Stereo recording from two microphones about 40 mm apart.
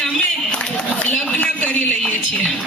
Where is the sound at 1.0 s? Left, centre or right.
Left.